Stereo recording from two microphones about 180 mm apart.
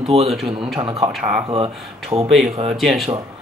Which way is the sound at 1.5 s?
30° right (ahead or behind).